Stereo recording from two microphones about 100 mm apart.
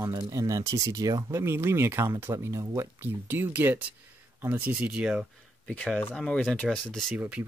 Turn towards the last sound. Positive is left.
turn(degrees=5)  # may be behind; listen again after turning